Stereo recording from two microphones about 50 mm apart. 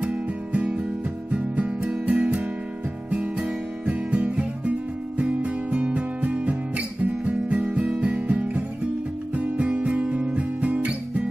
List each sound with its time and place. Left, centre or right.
0.0 s music: right
9.3 s guitar: right